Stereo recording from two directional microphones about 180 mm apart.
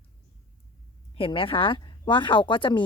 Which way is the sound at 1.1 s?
30° left (ahead or behind).